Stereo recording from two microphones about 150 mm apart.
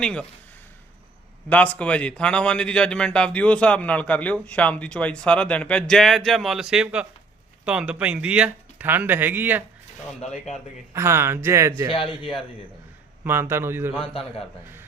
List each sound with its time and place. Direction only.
0.0 s a man's voice: 5° left (ahead or behind)
1.5 s a man's voice: 10° left (ahead or behind); by 9.6 s 10° right (ahead or behind)
10.3 s a man's voice: centre (ahead or behind)
10.9 s speech: 15° right (ahead or behind)
11.9 s a man's voice: 35° left (ahead or behind)
13.2 s speech: 15° right (ahead or behind)
14.0 s a man's voice: 35° left (ahead or behind)